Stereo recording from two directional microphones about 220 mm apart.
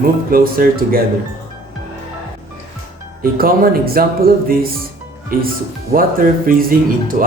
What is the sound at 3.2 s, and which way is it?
Speech, 40° right (ahead or behind).